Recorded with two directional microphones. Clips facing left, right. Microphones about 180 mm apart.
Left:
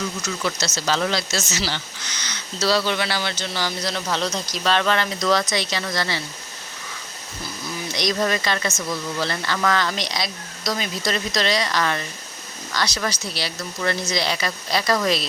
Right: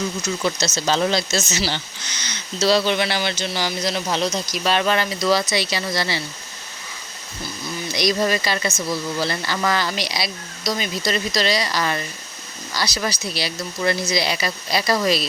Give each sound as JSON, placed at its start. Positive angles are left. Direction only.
{"t": 0.4, "sound": "speech", "side_deg": -20}
{"t": 7.9, "sound": "speech", "side_deg": -10}